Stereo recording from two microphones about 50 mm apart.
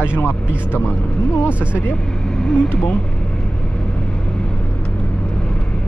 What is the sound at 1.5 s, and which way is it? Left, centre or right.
Speech, right.